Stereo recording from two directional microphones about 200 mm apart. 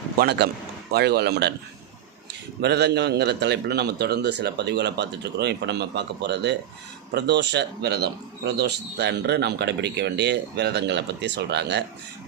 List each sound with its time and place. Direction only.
0.2 s a man's voice: 55° right (ahead or behind)
2.6 s speech: 55° right (ahead or behind)